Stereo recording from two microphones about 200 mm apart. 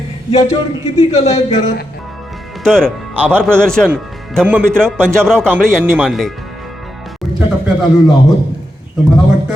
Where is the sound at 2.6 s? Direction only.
5° left (ahead or behind).